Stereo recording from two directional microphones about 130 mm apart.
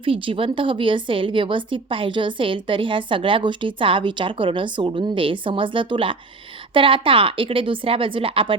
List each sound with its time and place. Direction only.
0.0 s a woman's voice: 45° right (ahead or behind)